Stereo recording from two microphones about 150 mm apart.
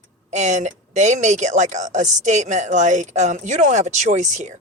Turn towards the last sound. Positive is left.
turn(degrees=-50)  # may be behind; listen again after turning